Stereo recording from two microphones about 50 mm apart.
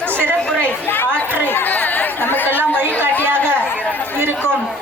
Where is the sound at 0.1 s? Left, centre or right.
Right.